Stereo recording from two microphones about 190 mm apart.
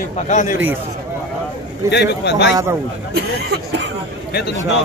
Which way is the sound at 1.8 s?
65° left (ahead or behind).